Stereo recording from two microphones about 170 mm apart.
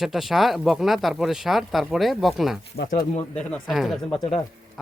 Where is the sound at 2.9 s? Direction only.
40° left (ahead or behind).